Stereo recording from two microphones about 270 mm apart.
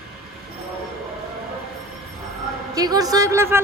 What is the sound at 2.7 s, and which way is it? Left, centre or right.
Speech, centre.